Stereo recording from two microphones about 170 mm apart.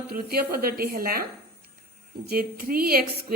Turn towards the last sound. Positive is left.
turn(degrees=-65)  # may be behind; listen again after turning